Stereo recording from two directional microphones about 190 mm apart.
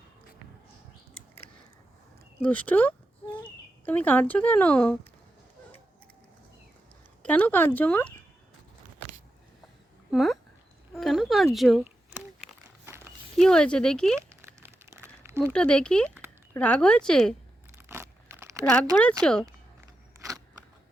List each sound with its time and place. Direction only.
2.4 s speech: 5° left (ahead or behind)
7.2 s speech: 10° left (ahead or behind)
10.1 s speech: centre (ahead or behind)
10.9 s a sound: centre (ahead or behind)
13.3 s speech: 5° left (ahead or behind)
14.2 s crumpling: 15° right (ahead or behind)
15.5 s speech: 5° left (ahead or behind)
16.0 s a sound: 10° right (ahead or behind)
16.6 s speech: 5° left (ahead or behind)
17.7 s a sound: 15° right (ahead or behind)
18.6 s speech: 5° left (ahead or behind)
20.1 s a sound: 15° right (ahead or behind)